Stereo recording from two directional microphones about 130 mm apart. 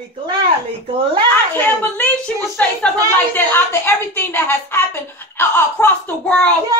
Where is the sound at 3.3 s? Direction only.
15° left (ahead or behind).